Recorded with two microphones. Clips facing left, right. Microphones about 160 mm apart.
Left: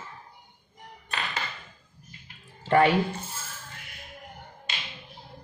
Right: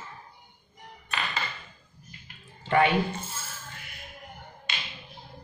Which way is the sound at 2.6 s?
40° left (ahead or behind).